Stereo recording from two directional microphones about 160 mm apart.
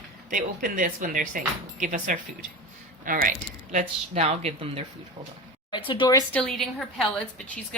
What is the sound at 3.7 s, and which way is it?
Speech, 40° right (ahead or behind).